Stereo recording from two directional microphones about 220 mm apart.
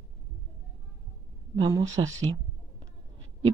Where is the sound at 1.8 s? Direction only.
60° right (ahead or behind).